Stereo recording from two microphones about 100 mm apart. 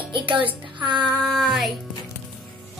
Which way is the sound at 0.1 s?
55° right (ahead or behind).